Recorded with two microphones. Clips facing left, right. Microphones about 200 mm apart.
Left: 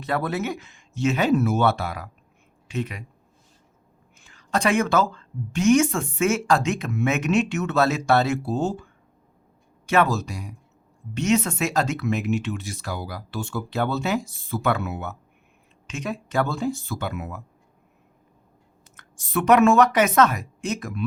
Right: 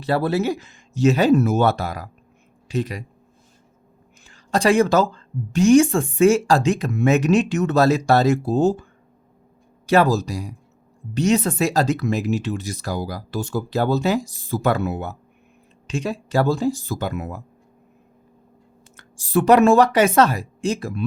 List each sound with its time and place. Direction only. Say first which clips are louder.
0.0 s speech: right 5 dB; 30° right (ahead or behind)
4.2 s speech: right 4 dB; 30° right (ahead or behind)
18.9 s speech: right 6 dB; 30° right (ahead or behind)